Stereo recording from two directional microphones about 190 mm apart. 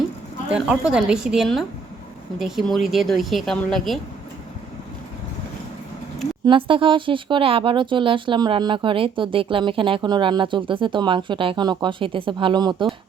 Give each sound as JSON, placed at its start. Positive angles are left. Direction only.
{"t": 0.5, "sound": "speech", "side_deg": -5}
{"t": 6.4, "sound": "speech", "side_deg": -25}